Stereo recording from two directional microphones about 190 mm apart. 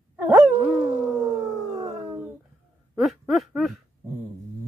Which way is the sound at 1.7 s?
30° right (ahead or behind).